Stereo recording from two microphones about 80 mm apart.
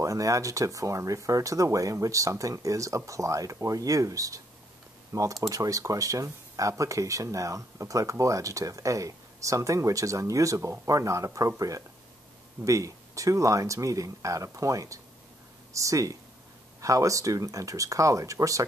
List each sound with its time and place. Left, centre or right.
0.0 s speech: right